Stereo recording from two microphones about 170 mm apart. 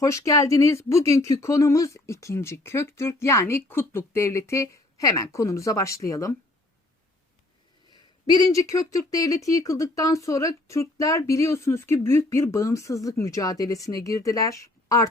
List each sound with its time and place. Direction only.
0.0 s speech: 20° left (ahead or behind)
7.9 s speech: 25° left (ahead or behind)